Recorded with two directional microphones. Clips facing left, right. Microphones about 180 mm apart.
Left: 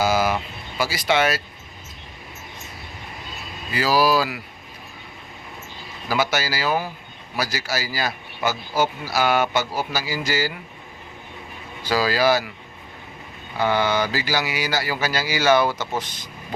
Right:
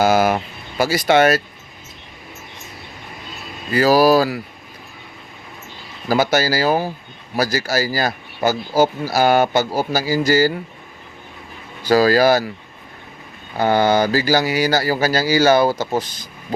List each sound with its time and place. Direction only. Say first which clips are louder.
0.0 s speech: right 5 dB; 55° right (ahead or behind)
3.7 s speech: right 6 dB; 45° right (ahead or behind)
6.1 s a man's voice: right 6 dB; 40° right (ahead or behind)
11.9 s speech: right 6 dB; 45° right (ahead or behind)
13.6 s a man's voice: right 5 dB; 45° right (ahead or behind)